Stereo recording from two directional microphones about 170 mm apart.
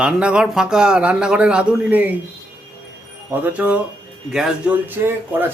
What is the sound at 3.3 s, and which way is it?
Speech, 10° right (ahead or behind).